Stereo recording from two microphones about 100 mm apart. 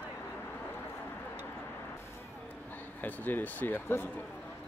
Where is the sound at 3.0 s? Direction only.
20° left (ahead or behind).